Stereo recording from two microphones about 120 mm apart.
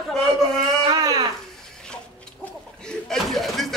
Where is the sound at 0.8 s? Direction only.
30° right (ahead or behind).